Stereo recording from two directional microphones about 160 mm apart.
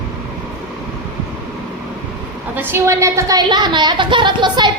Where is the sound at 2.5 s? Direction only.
15° right (ahead or behind).